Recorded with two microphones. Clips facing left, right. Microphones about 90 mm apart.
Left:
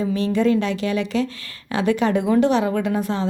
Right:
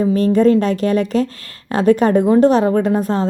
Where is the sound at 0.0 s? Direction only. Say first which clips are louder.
Right 7 dB; 40° right (ahead or behind).